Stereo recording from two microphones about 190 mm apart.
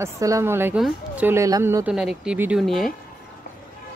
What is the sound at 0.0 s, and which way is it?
A woman's voice, 15° right (ahead or behind).